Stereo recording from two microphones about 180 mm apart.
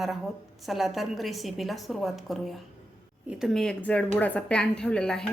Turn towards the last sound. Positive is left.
turn(degrees=5)  # may be behind; listen again after turning